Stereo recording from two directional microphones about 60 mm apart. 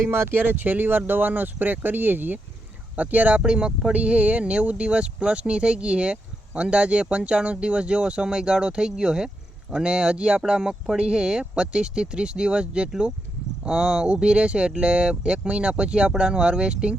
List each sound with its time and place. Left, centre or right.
0.1 s speech: right; by 16.9 s centre